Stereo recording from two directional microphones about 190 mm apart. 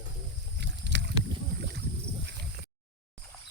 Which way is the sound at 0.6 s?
65° right (ahead or behind).